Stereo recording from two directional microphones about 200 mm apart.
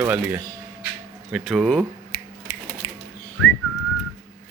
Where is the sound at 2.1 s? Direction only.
40° left (ahead or behind).